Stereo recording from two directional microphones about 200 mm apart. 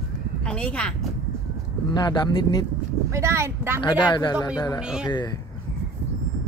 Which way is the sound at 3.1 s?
15° right (ahead or behind).